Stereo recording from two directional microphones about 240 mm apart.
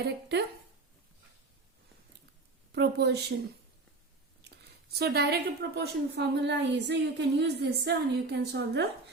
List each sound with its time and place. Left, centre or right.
0.0 s a woman's voice: right
2.7 s a woman's voice: right
4.4 s a woman's voice: right